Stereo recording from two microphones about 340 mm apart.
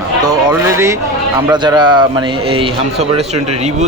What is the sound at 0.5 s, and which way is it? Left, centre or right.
Speech, centre.